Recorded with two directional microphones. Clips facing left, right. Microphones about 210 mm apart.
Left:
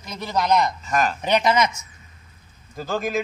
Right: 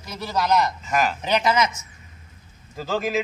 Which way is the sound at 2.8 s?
5° right (ahead or behind).